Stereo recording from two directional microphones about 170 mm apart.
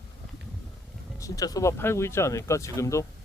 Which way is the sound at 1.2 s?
20° left (ahead or behind).